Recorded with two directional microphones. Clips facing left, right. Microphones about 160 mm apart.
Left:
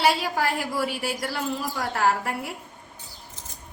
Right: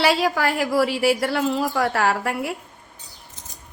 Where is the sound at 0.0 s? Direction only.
90° right.